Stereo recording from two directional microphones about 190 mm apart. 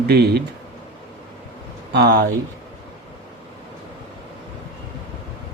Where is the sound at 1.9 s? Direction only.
55° right (ahead or behind).